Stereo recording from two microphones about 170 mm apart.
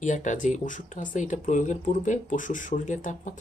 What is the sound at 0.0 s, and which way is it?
Speech, 45° left (ahead or behind).